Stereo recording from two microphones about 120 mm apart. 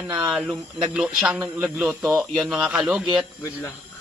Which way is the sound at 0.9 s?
10° right (ahead or behind).